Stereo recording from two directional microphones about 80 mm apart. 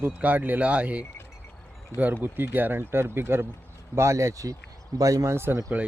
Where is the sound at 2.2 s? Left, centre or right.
Right.